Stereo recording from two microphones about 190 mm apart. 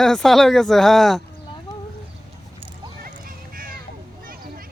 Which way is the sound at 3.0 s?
50° right (ahead or behind).